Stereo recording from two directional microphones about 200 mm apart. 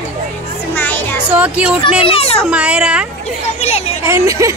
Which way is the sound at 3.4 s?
30° left (ahead or behind).